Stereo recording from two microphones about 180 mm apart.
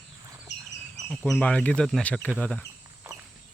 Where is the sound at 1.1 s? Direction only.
10° left (ahead or behind).